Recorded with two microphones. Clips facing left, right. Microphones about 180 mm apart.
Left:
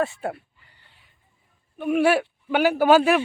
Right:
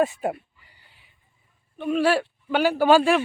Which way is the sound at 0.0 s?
15° right (ahead or behind).